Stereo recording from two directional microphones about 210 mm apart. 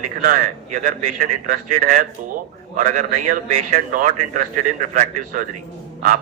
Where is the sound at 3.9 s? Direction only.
40° right (ahead or behind).